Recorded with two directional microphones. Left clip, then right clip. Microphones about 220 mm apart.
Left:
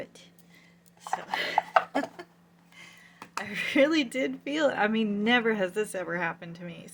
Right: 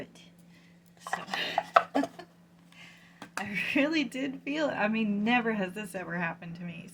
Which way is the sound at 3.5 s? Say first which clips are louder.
Left 4 dB; 45° left (ahead or behind).